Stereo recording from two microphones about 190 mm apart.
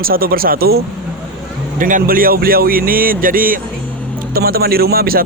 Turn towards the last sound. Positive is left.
turn(degrees=-50)  # may be behind; listen again after turning